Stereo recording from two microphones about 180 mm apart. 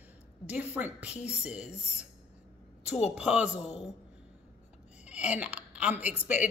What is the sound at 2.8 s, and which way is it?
Speech, 40° left (ahead or behind).